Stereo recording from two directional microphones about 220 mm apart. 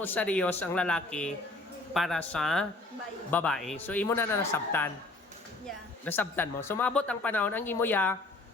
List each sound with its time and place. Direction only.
0.0 s a woman's voice: 5° left (ahead or behind)